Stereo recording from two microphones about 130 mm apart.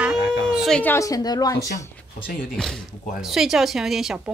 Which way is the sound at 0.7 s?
15° left (ahead or behind).